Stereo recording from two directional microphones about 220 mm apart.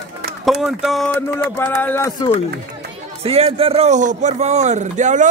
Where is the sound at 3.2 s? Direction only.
25° right (ahead or behind).